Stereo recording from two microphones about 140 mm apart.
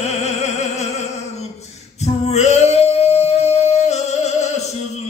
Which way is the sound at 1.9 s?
50° left (ahead or behind).